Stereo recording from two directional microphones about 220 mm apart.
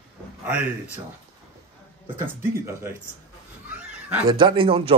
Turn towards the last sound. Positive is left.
turn(degrees=-25)  # may be behind; listen again after turning